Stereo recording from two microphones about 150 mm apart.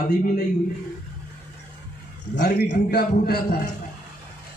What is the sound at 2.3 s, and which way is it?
A man's voice, 90° left.